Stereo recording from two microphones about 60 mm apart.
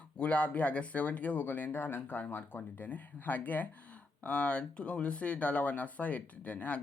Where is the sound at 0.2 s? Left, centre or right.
Left.